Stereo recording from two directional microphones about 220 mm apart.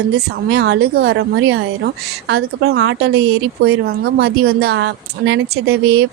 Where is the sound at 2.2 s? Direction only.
50° right (ahead or behind).